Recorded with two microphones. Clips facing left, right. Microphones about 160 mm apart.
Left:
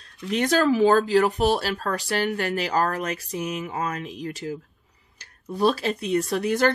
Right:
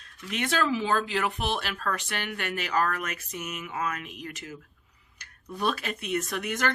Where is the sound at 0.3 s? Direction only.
40° left (ahead or behind).